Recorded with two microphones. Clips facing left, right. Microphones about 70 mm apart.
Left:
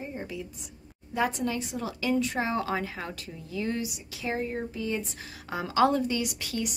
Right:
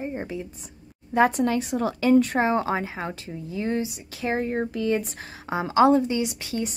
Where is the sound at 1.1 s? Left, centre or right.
Right.